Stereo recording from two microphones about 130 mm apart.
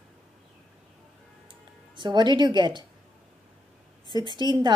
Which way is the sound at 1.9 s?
35° right (ahead or behind).